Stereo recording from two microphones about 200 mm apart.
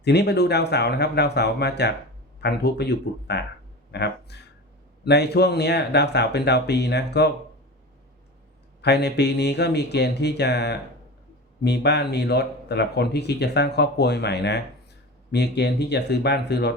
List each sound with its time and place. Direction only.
0.0 s speech: 55° left (ahead or behind)
8.8 s speech: 55° left (ahead or behind)